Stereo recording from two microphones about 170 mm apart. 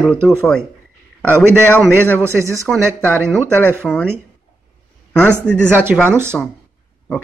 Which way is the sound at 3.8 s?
5° left (ahead or behind).